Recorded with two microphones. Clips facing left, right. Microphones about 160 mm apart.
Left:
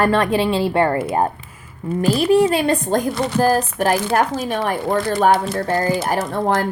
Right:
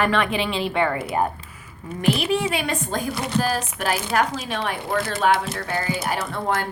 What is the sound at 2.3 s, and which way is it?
Speech, 45° left (ahead or behind).